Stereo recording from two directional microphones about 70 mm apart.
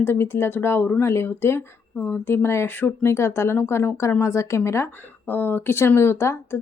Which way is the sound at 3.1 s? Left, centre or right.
Left.